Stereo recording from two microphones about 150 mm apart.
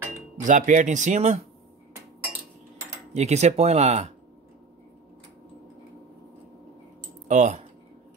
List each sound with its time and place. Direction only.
0.1 s cutlery: 60° right (ahead or behind)
3.1 s speech: 50° right (ahead or behind)
7.2 s speech: 55° right (ahead or behind)